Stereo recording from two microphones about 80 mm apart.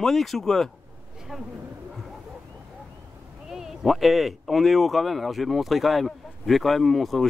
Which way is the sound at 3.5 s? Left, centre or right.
Centre.